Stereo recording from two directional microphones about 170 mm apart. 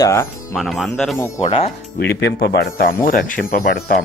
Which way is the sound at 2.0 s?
90° left.